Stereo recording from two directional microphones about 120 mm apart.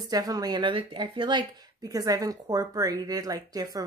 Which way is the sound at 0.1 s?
30° right (ahead or behind).